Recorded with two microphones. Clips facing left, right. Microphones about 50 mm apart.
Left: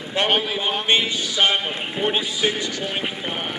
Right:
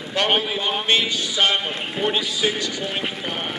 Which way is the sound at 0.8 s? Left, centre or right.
Centre.